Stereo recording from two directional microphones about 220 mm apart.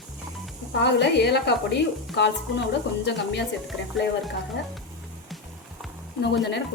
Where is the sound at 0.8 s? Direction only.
50° left (ahead or behind).